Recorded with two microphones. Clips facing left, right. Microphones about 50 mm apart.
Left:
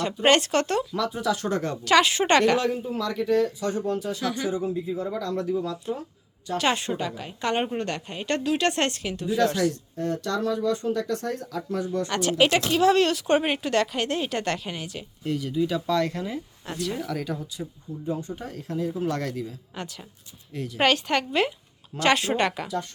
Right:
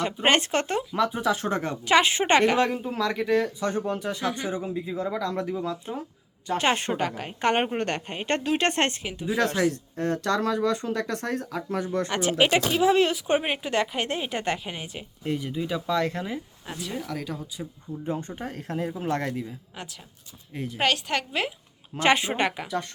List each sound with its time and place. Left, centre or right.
0.0 s speech: right
0.9 s speech: right
2.8 s a woman's voice: right
9.0 s speech: centre
9.2 s a woman's voice: right
10.0 s speech: right
12.1 s speech: centre
16.6 s speech: centre
18.0 s a woman's voice: right
18.9 s speech: right
19.7 s speech: centre
20.5 s speech: right
20.7 s speech: centre
21.9 s speech: centre